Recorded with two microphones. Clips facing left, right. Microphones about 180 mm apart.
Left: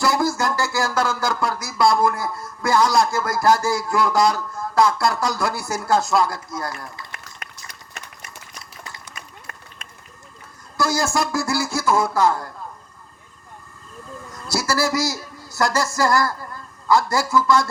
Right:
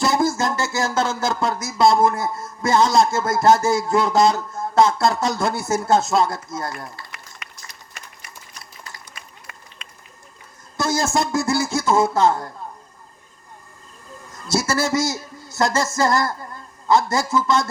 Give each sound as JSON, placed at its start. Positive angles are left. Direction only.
{"t": 0.0, "sound": "a sound", "side_deg": -20}
{"t": 9.2, "sound": "run", "side_deg": 45}
{"t": 10.8, "sound": "speech", "side_deg": -20}
{"t": 14.4, "sound": "speech", "side_deg": -20}